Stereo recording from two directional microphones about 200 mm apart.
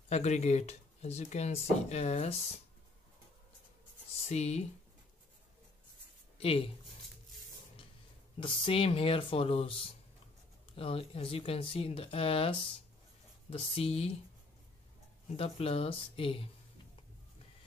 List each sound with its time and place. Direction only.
0.1 s speech: 35° left (ahead or behind)
4.3 s speech: 35° left (ahead or behind)
6.3 s speech: 30° left (ahead or behind)
8.4 s speech: 25° left (ahead or behind)
15.2 s speech: 30° left (ahead or behind)